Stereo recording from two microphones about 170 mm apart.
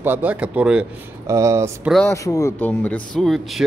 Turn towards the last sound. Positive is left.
turn(degrees=0)  # may be behind; listen again after turning